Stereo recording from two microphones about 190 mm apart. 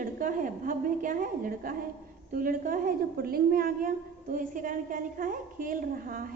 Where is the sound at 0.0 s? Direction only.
45° right (ahead or behind).